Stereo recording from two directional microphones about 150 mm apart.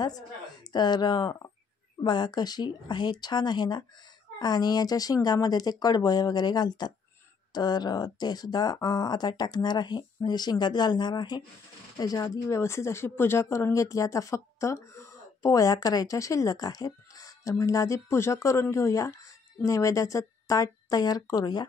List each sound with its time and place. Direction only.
0.7 s speech: 30° left (ahead or behind)